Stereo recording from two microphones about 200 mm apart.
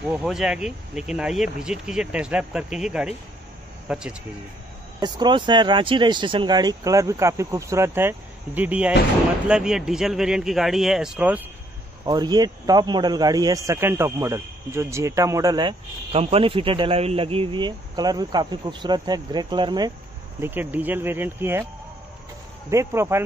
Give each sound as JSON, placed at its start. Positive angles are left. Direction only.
{"t": 0.0, "sound": "speech", "side_deg": -5}
{"t": 5.0, "sound": "speech", "side_deg": -20}
{"t": 12.0, "sound": "speech", "side_deg": -20}
{"t": 20.3, "sound": "speech", "side_deg": -10}
{"t": 22.7, "sound": "speech", "side_deg": -15}